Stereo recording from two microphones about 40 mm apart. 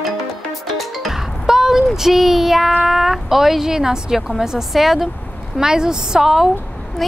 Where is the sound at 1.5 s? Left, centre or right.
Centre.